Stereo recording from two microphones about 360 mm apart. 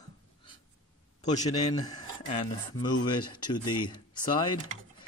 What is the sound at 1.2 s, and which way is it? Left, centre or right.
Speech, centre.